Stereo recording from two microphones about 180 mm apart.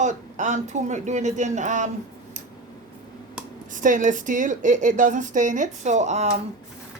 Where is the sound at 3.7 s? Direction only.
45° right (ahead or behind).